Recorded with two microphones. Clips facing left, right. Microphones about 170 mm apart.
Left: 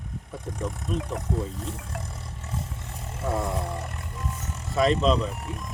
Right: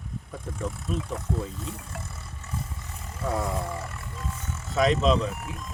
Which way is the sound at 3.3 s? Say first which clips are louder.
Left 1 dB; centre (ahead or behind).